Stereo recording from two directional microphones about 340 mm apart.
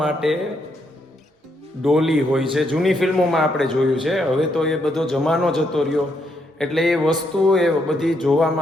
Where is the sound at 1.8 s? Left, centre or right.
Centre.